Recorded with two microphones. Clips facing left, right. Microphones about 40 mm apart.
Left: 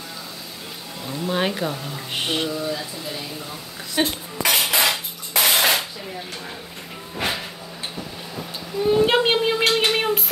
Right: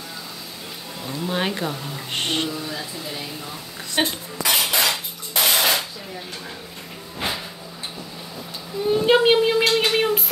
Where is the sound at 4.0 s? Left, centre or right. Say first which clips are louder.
Even; right.